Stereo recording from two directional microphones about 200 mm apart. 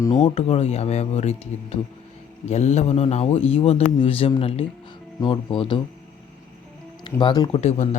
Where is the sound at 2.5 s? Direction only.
35° left (ahead or behind).